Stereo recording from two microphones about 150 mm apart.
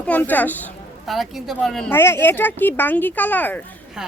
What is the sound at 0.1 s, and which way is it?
Speech, 10° left (ahead or behind).